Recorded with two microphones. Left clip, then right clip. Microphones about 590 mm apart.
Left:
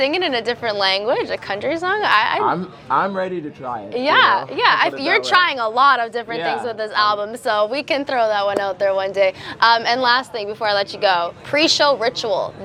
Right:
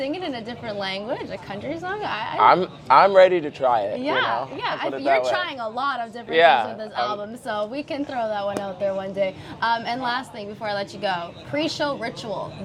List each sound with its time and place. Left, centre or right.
0.0 s a woman's voice: left
2.4 s a man's voice: right
4.0 s a woman's voice: left